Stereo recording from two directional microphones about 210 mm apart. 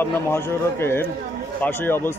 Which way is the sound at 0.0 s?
10° left (ahead or behind).